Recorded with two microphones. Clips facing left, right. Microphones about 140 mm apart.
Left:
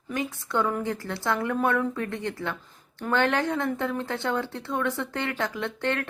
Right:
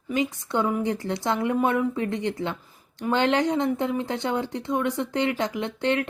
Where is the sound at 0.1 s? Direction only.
15° right (ahead or behind).